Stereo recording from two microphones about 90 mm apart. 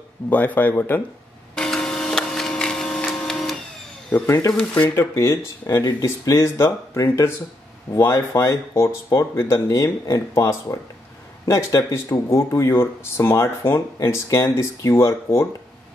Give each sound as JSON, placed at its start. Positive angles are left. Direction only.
{"t": 0.3, "sound": "speech", "side_deg": 20}
{"t": 1.5, "sound": "a sound", "side_deg": 10}
{"t": 4.3, "sound": "speech", "side_deg": 40}
{"t": 4.6, "sound": "speech", "side_deg": 20}
{"t": 13.9, "sound": "speech", "side_deg": 35}